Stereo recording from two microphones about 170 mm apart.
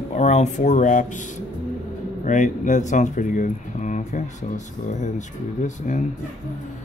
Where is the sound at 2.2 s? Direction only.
45° left (ahead or behind).